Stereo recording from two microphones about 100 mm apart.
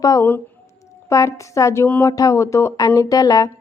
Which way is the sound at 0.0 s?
40° left (ahead or behind).